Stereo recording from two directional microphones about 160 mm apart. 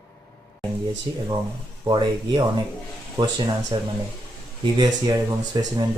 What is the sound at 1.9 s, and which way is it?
Speech, 30° right (ahead or behind).